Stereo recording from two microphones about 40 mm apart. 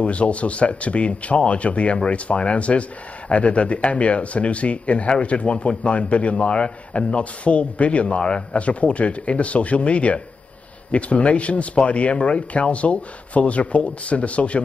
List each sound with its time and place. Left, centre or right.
0.0 s a man's voice: left